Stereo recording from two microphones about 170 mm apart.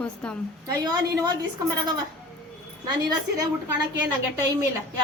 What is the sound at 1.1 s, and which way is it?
Speech, 20° right (ahead or behind).